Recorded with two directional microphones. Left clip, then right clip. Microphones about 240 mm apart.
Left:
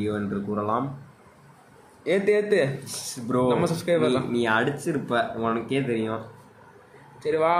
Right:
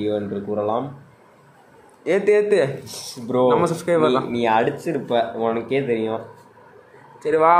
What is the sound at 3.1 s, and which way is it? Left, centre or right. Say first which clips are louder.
Speech: right 6 dB; centre.